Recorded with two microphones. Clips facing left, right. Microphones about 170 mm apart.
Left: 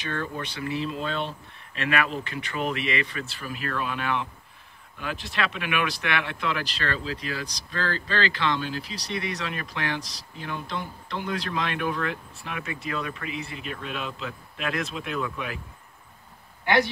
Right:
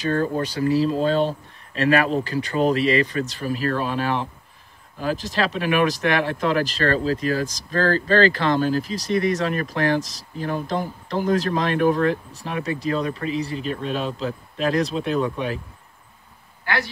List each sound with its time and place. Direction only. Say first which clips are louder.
0.0 s speech: right 10 dB; 40° right (ahead or behind)
16.6 s speech: left 4 dB; 20° left (ahead or behind)